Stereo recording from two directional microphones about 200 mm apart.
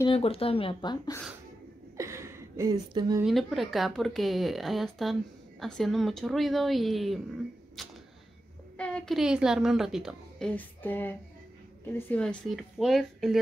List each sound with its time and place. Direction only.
0.0 s speech: 30° left (ahead or behind)
2.0 s a sound: 15° right (ahead or behind)
3.3 s a woman's voice: centre (ahead or behind)
8.7 s a woman's voice: 5° left (ahead or behind)